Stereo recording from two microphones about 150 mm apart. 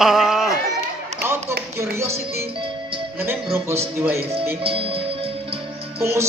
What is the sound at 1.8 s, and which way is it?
Speech, 20° right (ahead or behind).